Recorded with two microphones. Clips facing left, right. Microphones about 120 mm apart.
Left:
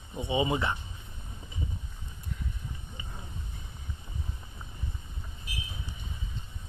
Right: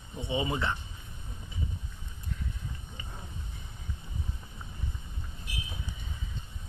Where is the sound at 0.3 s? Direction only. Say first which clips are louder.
Left 3 dB; 20° left (ahead or behind).